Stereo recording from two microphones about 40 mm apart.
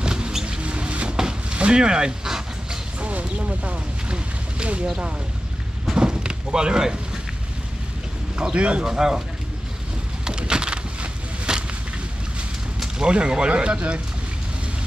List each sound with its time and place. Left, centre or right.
0.0 s rodents: centre
0.6 s rodents: right
1.5 s dog: right
3.0 s a sound: right
5.9 s a sound: right
8.4 s speech: right
8.9 s speech: centre
10.2 s a sound: right
13.0 s speech: right